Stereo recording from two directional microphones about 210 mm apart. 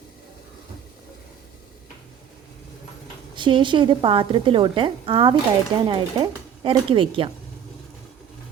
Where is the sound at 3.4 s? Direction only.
25° right (ahead or behind).